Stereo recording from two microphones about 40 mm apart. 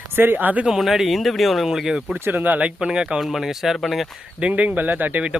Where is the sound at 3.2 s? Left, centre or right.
Centre.